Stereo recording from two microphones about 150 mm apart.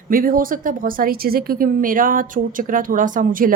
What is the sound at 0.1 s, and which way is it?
A woman's voice, 70° right (ahead or behind).